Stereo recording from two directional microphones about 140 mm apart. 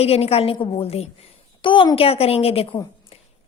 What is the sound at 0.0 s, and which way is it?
A woman's voice, 45° left (ahead or behind).